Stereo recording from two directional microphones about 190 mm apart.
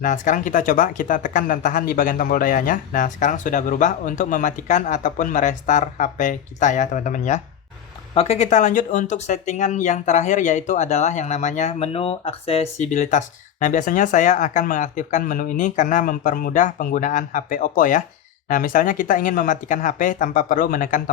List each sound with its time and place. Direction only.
0.0 s speech: 40° left (ahead or behind)